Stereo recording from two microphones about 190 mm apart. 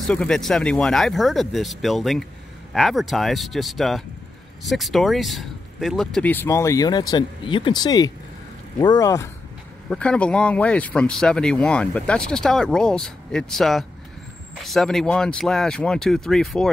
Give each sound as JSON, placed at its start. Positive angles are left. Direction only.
{"t": 0.0, "sound": "speech", "side_deg": 5}
{"t": 9.8, "sound": "speech", "side_deg": 5}